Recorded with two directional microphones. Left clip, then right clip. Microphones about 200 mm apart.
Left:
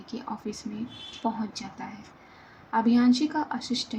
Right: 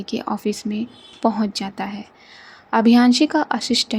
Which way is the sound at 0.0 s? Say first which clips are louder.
Right 12 dB; 55° right (ahead or behind).